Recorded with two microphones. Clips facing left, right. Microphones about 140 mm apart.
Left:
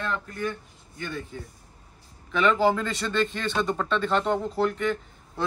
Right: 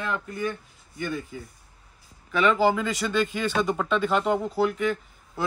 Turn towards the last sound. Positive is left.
turn(degrees=-5)  # may be behind; listen again after turning